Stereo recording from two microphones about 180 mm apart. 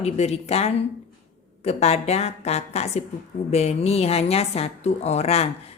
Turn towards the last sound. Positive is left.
turn(degrees=35)  # may be behind; listen again after turning